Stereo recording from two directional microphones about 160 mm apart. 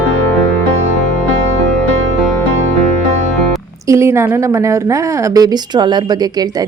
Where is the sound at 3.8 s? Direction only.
15° right (ahead or behind).